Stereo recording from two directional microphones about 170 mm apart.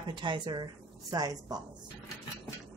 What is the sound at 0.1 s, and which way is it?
Speech, 30° right (ahead or behind).